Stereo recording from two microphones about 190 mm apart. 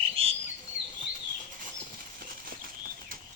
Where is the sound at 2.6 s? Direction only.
45° right (ahead or behind).